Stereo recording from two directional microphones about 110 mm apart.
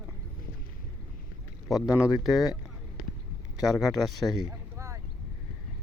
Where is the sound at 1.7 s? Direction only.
5° right (ahead or behind).